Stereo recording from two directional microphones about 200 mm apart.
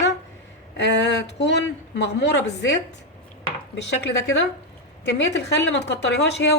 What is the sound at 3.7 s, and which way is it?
Speech, 60° left (ahead or behind).